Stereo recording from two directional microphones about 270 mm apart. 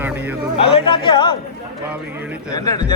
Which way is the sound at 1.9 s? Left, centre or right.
Centre.